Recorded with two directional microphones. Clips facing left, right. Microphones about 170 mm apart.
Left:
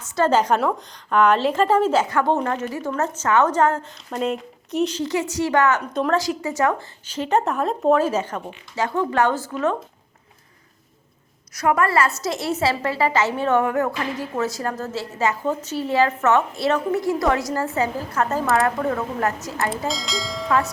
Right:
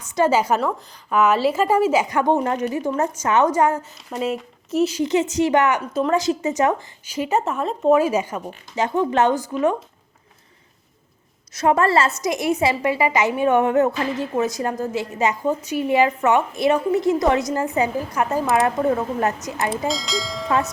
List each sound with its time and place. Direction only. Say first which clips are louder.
0.0 s a woman's voice: even; 10° right (ahead or behind)
5.0 s a woman's voice: right 4 dB; 20° right (ahead or behind)
5.9 s speech: right 1 dB; 5° right (ahead or behind)
6.1 s a woman's voice: right 2 dB; 20° right (ahead or behind); by 7.9 s centre (ahead or behind)
7.9 s a woman's voice: right 2 dB; 10° right (ahead or behind)
11.5 s a woman's voice: right 2 dB; 25° right (ahead or behind)
19.9 s speech: right 2 dB; centre (ahead or behind)